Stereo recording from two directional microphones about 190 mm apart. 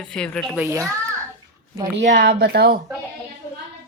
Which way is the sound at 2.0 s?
50° right (ahead or behind).